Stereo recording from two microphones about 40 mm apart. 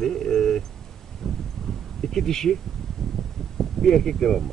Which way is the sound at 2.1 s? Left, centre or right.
Centre.